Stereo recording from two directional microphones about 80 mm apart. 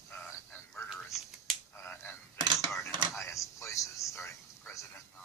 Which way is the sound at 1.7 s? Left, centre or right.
Left.